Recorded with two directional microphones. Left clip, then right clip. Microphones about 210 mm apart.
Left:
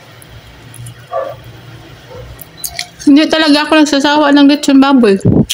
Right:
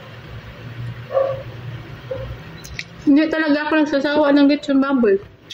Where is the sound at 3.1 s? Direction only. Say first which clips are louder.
Left 8 dB; 50° left (ahead or behind).